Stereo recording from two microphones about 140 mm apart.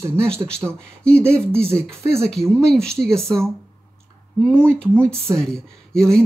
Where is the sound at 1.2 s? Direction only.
20° right (ahead or behind).